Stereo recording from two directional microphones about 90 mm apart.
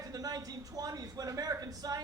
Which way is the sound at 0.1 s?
45° right (ahead or behind).